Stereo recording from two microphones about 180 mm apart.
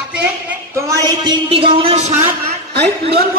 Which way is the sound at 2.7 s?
65° right (ahead or behind).